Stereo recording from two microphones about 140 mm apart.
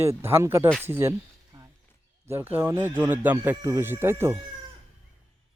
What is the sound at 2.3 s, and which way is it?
Speech, 15° right (ahead or behind).